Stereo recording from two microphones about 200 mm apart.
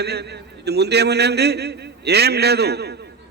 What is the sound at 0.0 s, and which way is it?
A man's voice, 55° right (ahead or behind).